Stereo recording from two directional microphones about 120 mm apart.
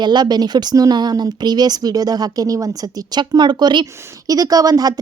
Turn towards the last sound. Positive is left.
turn(degrees=-30)  # may be behind; listen again after turning